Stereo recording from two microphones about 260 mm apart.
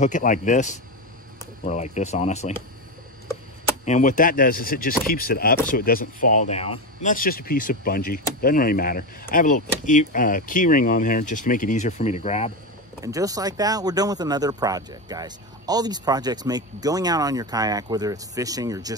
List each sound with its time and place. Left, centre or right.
0.0 s speech: left
3.8 s speech: left
13.0 s speech: centre